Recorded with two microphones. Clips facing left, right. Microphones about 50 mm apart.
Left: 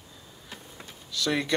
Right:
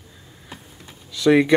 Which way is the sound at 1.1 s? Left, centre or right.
Centre.